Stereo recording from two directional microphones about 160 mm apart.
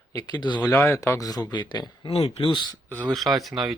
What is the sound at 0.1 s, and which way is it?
Speech, 20° left (ahead or behind).